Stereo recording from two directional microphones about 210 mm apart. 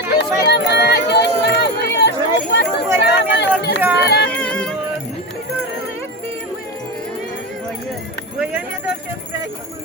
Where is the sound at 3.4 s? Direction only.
55° left (ahead or behind).